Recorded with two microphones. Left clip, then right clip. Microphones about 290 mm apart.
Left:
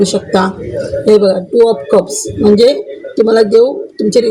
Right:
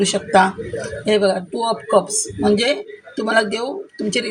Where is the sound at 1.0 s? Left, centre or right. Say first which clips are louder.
Left 8 dB; right.